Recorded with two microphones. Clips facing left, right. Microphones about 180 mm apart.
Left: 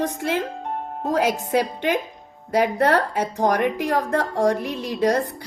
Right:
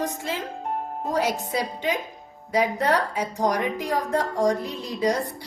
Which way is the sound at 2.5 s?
60° left (ahead or behind).